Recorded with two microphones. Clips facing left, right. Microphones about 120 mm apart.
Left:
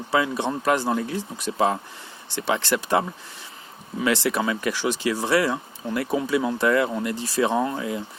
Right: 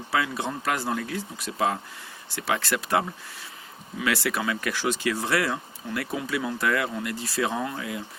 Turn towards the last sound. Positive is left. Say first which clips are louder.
# left 6 dB
turn(degrees=30)  # may be behind; listen again after turning